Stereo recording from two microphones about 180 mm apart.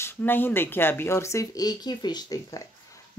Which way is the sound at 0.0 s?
10° left (ahead or behind).